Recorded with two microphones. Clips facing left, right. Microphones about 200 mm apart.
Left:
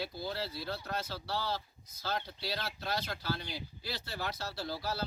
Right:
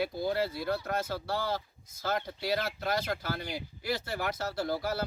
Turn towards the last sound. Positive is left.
turn(degrees=-50)  # may be behind; listen again after turning